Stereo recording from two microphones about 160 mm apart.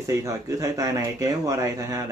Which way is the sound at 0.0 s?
20° right (ahead or behind).